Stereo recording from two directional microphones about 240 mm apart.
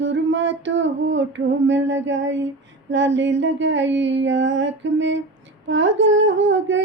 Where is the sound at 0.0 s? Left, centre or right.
Right.